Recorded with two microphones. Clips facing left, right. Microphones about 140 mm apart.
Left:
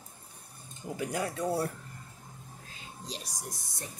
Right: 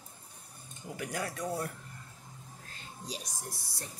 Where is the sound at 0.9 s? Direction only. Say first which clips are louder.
Left 4 dB; 20° left (ahead or behind).